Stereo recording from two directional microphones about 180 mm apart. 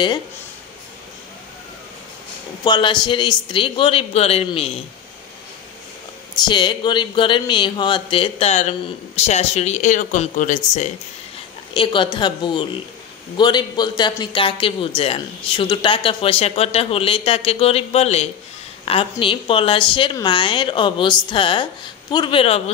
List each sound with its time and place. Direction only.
2.6 s a woman's voice: 25° left (ahead or behind)
6.3 s a man's voice: 25° left (ahead or behind); by 10.9 s 45° left (ahead or behind)
11.7 s a woman's voice: 30° left (ahead or behind)